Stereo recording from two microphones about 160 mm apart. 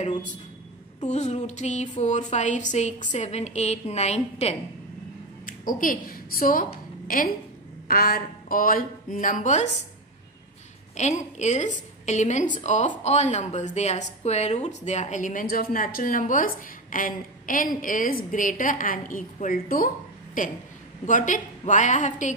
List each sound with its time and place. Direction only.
1.0 s a woman's voice: 45° left (ahead or behind)
5.4 s a woman's voice: 60° left (ahead or behind)
11.0 s a woman's voice: 45° left (ahead or behind)